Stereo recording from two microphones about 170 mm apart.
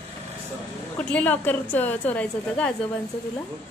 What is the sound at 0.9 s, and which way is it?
A woman's voice, 10° left (ahead or behind).